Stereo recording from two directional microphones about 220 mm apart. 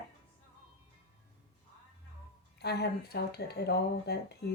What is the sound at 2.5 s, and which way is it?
Speech, 50° left (ahead or behind).